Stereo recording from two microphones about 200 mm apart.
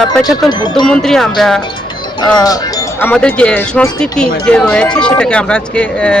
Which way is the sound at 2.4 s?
20° left (ahead or behind).